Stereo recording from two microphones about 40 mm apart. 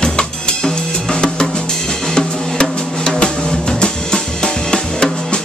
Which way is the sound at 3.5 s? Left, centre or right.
Centre.